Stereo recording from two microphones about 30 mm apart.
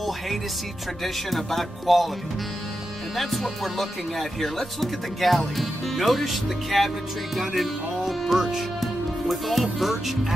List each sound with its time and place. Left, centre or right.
1.0 s speech: centre
3.2 s speech: centre